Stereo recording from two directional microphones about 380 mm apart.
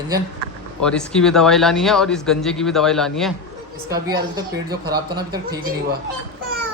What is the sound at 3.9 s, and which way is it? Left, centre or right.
Speech, centre.